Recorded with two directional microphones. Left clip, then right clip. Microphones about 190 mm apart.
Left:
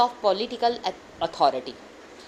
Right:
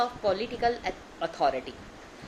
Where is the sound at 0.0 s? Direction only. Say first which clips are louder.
Left 5 dB; 25° left (ahead or behind).